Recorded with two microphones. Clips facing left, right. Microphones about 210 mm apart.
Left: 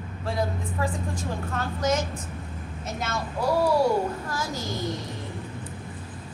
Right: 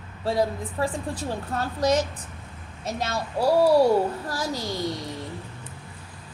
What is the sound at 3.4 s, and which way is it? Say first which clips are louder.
Speech: right 4 dB; 35° right (ahead or behind).